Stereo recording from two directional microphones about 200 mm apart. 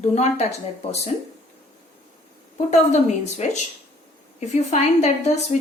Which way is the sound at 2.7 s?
35° left (ahead or behind).